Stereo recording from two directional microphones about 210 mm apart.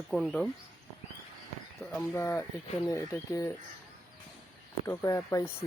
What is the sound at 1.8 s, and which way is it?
Speech, 10° left (ahead or behind).